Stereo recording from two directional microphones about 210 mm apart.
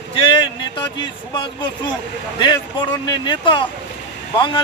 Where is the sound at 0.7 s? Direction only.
20° left (ahead or behind).